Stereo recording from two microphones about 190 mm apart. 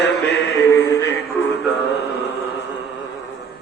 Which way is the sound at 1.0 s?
60° left (ahead or behind).